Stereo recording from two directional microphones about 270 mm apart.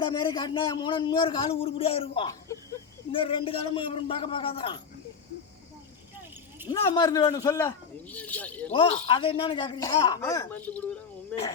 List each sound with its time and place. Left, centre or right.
0.0 s a man's voice: centre
6.7 s a man's voice: centre
8.7 s a man's voice: centre